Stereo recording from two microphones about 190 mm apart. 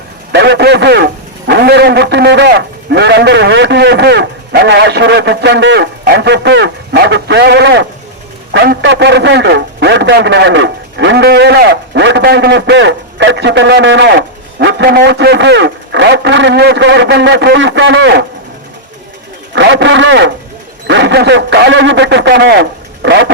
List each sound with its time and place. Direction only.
0.3 s a man's voice: 65° right (ahead or behind)
19.5 s a man's voice: 70° right (ahead or behind)